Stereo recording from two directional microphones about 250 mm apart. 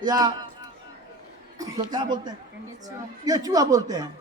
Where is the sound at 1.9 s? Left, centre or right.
Centre.